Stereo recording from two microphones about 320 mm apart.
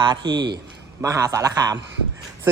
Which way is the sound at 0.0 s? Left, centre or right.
Centre.